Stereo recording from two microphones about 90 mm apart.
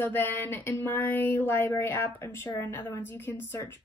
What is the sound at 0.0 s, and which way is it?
A woman's voice, 25° left (ahead or behind).